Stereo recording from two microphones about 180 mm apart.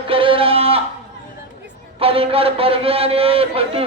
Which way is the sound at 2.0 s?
30° right (ahead or behind).